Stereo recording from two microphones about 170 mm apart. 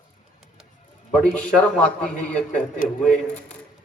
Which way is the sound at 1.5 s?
5° left (ahead or behind).